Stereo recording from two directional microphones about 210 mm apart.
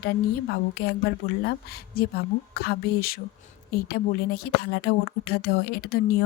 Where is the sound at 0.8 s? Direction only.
50° left (ahead or behind).